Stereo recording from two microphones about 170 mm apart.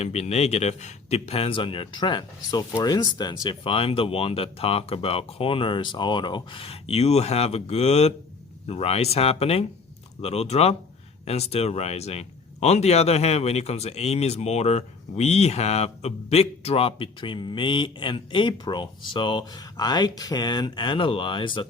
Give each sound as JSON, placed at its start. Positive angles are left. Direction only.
{"t": 0.0, "sound": "speech", "side_deg": 40}